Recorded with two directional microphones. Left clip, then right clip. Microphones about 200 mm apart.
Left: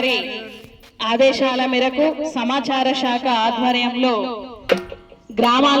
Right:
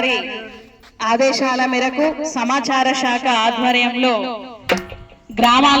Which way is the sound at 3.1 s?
40° right (ahead or behind).